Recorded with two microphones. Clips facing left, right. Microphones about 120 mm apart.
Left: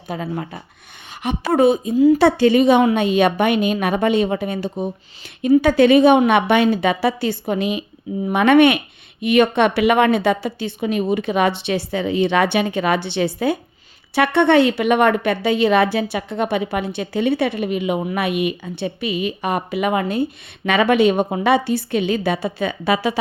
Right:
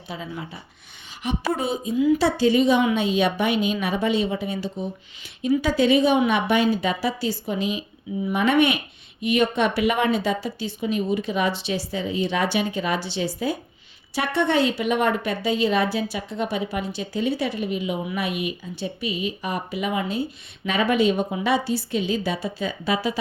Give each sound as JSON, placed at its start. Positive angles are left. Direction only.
{"t": 0.1, "sound": "speech", "side_deg": 55}
{"t": 20.7, "sound": "speech", "side_deg": 70}